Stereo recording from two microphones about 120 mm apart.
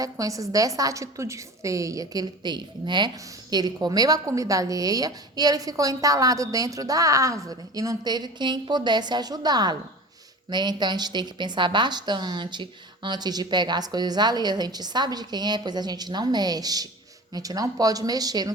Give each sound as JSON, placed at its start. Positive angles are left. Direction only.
{"t": 0.0, "sound": "a woman's voice", "side_deg": -30}